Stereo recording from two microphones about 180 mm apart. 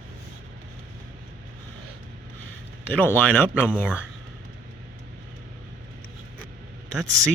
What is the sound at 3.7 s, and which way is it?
Speech, 10° right (ahead or behind).